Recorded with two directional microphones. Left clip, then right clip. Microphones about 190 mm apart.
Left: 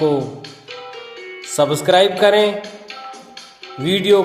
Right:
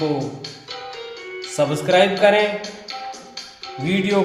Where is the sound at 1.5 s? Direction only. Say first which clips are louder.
Left 3 dB; 40° left (ahead or behind).